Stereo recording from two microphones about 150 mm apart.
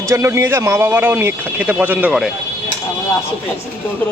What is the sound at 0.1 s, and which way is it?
Speech, 20° right (ahead or behind).